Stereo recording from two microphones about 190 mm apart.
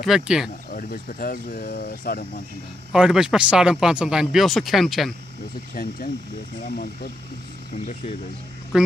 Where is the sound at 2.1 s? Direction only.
50° left (ahead or behind).